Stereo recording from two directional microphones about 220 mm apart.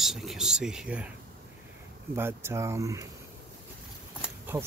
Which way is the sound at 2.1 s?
10° right (ahead or behind).